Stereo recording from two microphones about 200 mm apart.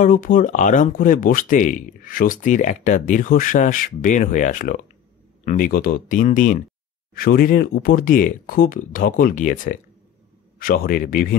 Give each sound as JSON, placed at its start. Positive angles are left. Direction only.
{"t": 0.0, "sound": "speech", "side_deg": 40}